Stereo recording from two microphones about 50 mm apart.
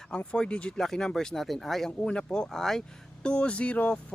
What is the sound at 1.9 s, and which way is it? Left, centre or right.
Speech, centre.